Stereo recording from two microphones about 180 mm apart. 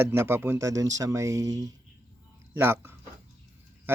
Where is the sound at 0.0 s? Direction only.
15° right (ahead or behind).